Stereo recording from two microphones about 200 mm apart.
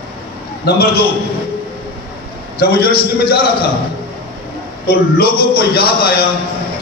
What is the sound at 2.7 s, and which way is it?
Speech, 50° left (ahead or behind).